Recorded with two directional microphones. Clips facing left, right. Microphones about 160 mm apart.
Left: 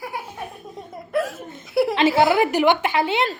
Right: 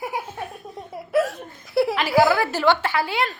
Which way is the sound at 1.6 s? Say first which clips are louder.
Left 1 dB; centre (ahead or behind).